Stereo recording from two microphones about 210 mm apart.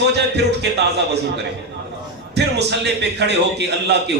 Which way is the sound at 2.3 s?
55° right (ahead or behind).